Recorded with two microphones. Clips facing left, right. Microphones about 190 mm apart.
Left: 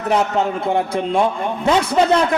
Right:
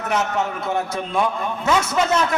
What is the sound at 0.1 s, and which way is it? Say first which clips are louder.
A man's voice: left 5 dB; 30° left (ahead or behind).